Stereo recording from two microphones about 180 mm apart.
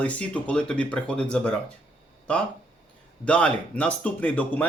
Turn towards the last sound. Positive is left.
turn(degrees=10)  # may be behind; listen again after turning